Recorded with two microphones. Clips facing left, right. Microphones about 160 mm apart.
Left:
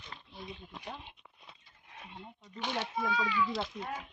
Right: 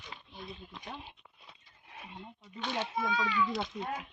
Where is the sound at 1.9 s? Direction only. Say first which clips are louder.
Right 1 dB; 5° right (ahead or behind).